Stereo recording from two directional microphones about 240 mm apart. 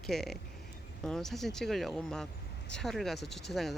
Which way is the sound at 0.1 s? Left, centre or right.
Centre.